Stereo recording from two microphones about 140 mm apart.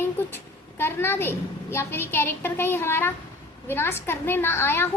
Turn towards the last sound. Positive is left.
turn(degrees=15)  # may be behind; listen again after turning